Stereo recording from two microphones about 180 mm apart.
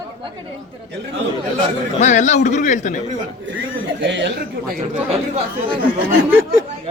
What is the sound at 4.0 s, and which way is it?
Speech, 80° right.